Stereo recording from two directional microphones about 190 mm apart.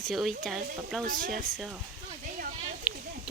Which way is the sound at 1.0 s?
45° right (ahead or behind).